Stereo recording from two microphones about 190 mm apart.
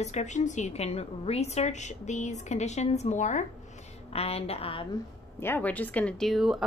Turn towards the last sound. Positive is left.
turn(degrees=0)  # may be behind; listen again after turning